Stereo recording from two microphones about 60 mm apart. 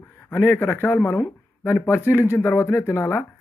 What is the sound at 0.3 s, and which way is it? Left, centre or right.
Speech, left.